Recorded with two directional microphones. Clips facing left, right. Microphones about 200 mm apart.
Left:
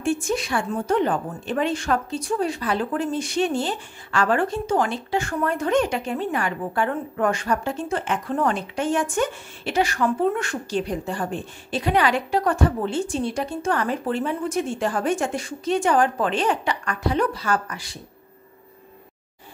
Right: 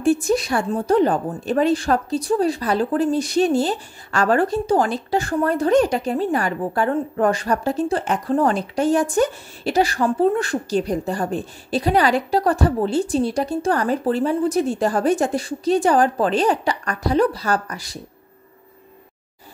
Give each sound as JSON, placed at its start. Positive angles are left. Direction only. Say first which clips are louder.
{"t": 0.0, "sound": "a woman's voice", "louder": "right 6 dB", "side_deg": -40}